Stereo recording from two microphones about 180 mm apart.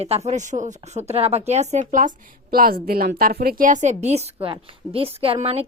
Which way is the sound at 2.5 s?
55° right (ahead or behind).